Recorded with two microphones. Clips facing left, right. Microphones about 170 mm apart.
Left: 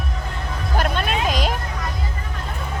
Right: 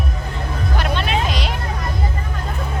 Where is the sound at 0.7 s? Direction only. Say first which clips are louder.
Even; 45° left (ahead or behind).